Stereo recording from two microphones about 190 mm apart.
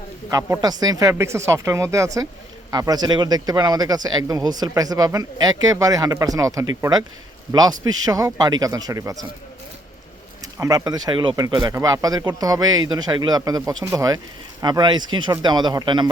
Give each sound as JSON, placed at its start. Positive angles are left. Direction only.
{"t": 0.3, "sound": "speech", "side_deg": -15}
{"t": 10.6, "sound": "speech", "side_deg": -20}